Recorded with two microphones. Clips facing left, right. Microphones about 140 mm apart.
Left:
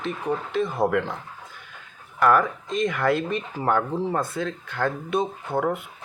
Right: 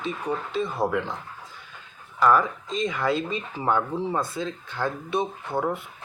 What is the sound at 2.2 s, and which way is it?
Speech, 60° left (ahead or behind).